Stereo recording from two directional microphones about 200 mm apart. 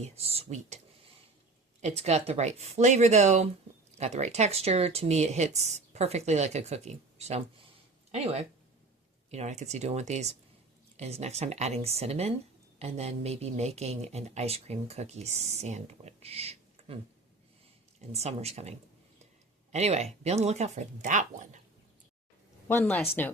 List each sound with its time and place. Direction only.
0.0 s speech: 30° right (ahead or behind)
1.8 s speech: 30° right (ahead or behind)
18.1 s speech: 30° right (ahead or behind)
19.7 s speech: 35° right (ahead or behind)
22.7 s speech: 10° left (ahead or behind)